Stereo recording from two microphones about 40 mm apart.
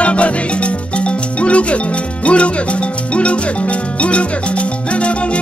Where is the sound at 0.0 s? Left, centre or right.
Left.